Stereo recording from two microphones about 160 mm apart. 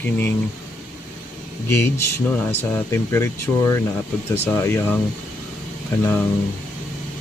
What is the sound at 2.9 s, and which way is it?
Speech, 15° left (ahead or behind).